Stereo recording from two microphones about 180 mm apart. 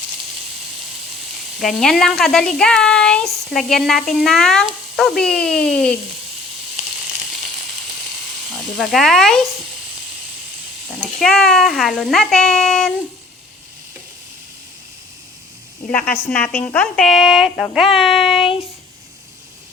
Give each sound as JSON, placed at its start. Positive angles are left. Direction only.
{"t": 1.5, "sound": "a woman's voice", "side_deg": 0}
{"t": 8.8, "sound": "a woman's voice", "side_deg": 0}
{"t": 11.0, "sound": "a woman's voice", "side_deg": 5}
{"t": 15.9, "sound": "a woman's voice", "side_deg": 10}